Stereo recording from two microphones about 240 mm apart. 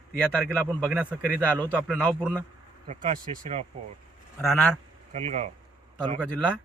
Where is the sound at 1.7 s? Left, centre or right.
Centre.